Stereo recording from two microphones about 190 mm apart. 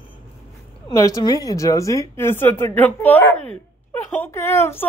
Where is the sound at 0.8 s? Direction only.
20° left (ahead or behind).